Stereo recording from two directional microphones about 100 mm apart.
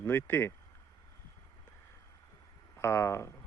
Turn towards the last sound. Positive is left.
turn(degrees=25)  # may be behind; listen again after turning